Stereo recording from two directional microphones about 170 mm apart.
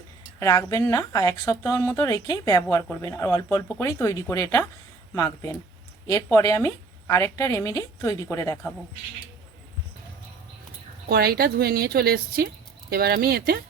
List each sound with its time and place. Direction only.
0.3 s a woman's voice: 15° left (ahead or behind)
11.1 s a woman's voice: 65° right (ahead or behind)